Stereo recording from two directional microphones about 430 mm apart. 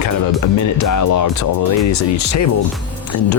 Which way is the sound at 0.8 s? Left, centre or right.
Left.